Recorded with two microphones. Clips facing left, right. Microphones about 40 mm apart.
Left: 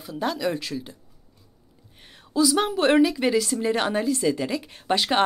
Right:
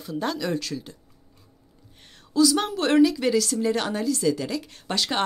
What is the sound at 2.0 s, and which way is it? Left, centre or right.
A woman's voice, centre.